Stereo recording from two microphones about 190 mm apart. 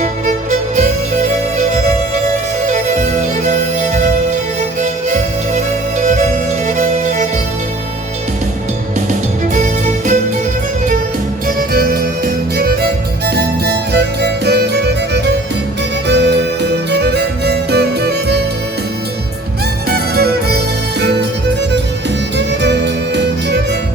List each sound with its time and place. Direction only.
0.0 s music: 40° right (ahead or behind)
9.6 s music: 40° right (ahead or behind)
11.4 s music: 50° right (ahead or behind)
19.9 s music: 55° right (ahead or behind)
22.4 s music: 65° right (ahead or behind)